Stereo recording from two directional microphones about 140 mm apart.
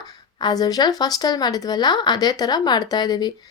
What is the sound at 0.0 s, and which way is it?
Speech, 30° left (ahead or behind).